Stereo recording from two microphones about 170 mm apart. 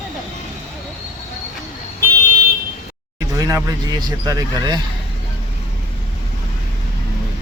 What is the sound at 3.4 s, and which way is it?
Speech, 20° right (ahead or behind).